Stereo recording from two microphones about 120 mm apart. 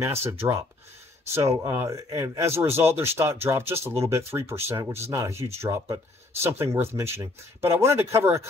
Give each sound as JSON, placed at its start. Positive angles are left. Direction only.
{"t": 0.0, "sound": "speech", "side_deg": -20}